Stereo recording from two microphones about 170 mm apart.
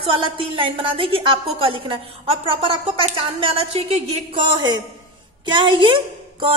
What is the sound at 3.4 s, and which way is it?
A woman's voice, 35° right (ahead or behind).